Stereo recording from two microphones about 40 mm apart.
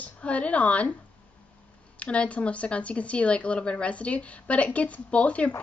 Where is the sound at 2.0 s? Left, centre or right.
Left.